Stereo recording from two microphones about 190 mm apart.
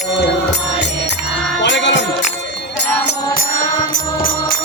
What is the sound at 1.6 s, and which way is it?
Jingle bell, 70° left (ahead or behind).